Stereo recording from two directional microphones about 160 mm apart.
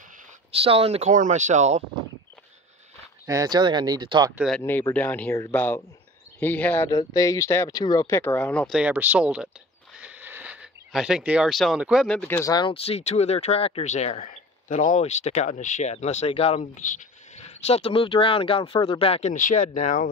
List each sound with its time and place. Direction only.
0.6 s speech: 35° right (ahead or behind)
1.1 s speech: 50° right (ahead or behind)
3.3 s speech: 25° right (ahead or behind)
4.5 s speech: 10° left (ahead or behind)
6.9 s speech: 20° left (ahead or behind)
8.6 s speech: 5° right (ahead or behind)
9.9 s a sound: 10° right (ahead or behind)
12.2 s speech: 15° left (ahead or behind)
12.7 s speech: 40° left (ahead or behind)
19.3 s speech: 55° left (ahead or behind)